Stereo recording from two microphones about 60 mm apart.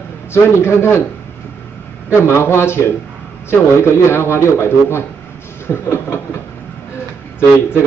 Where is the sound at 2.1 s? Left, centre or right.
Left.